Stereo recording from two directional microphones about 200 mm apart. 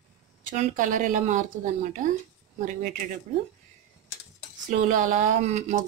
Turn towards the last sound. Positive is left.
turn(degrees=-35)  # may be behind; listen again after turning